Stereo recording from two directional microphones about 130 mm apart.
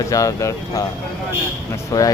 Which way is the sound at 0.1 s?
25° left (ahead or behind).